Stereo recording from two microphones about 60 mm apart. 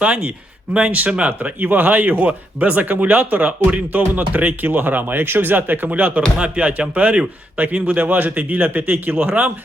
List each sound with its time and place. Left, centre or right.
0.0 s speech: right